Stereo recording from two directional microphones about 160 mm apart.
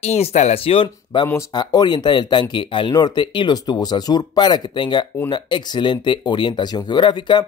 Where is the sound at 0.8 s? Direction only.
25° left (ahead or behind).